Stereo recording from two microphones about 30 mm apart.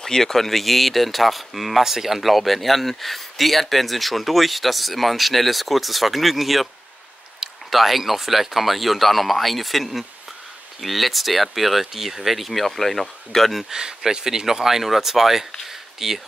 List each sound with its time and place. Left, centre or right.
0.0 s speech: centre
13.7 s speech: right
15.6 s a sound: centre